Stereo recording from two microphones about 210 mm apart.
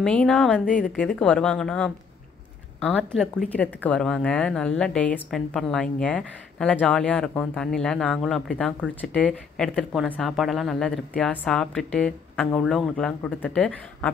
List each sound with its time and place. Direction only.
0.0 s speech: 5° left (ahead or behind)